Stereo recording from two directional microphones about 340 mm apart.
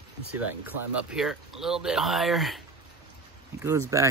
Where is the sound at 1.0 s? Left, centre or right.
Centre.